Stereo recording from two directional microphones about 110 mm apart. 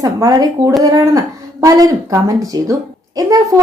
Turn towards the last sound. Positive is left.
turn(degrees=-35)  # may be behind; listen again after turning